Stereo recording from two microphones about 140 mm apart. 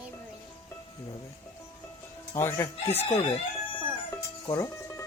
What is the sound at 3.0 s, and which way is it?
Chicken, 50° left (ahead or behind).